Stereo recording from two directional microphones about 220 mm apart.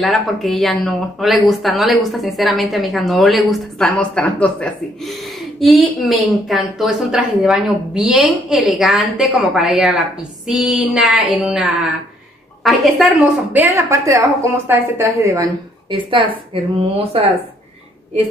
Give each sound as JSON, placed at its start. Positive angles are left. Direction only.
{"t": 0.0, "sound": "a woman's voice", "side_deg": 0}